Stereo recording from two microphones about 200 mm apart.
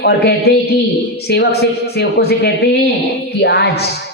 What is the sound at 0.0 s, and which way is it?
A man's voice, 55° left (ahead or behind).